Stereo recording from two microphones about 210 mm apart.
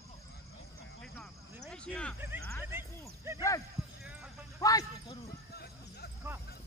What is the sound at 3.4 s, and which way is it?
Speech, 15° left (ahead or behind).